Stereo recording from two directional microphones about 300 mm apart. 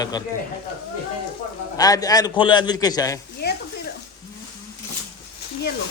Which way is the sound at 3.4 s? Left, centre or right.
Left.